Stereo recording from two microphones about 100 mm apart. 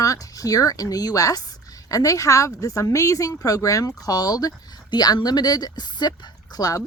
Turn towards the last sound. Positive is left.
turn(degrees=35)  # may be behind; listen again after turning